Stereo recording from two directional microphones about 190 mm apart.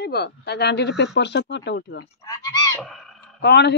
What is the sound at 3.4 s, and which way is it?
Speech, 65° left (ahead or behind).